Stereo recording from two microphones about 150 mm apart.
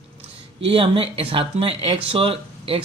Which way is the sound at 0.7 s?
40° right (ahead or behind).